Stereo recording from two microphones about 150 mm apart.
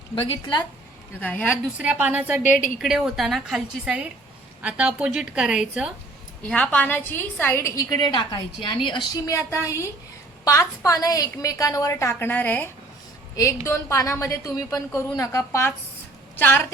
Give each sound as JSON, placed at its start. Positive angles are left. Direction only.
{"t": 1.2, "sound": "a woman's voice", "side_deg": 10}
{"t": 1.8, "sound": "a woman's voice", "side_deg": -10}
{"t": 6.4, "sound": "a woman's voice", "side_deg": 10}